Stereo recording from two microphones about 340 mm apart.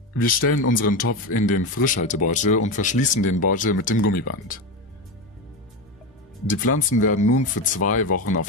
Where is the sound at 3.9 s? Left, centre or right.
Left.